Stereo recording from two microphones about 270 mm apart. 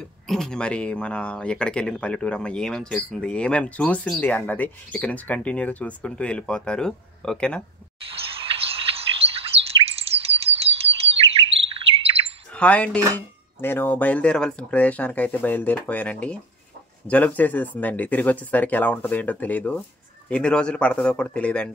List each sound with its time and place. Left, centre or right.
0.3 s speech: centre
8.0 s bird vocalization: right
11.7 s bird: right
12.5 s speech: centre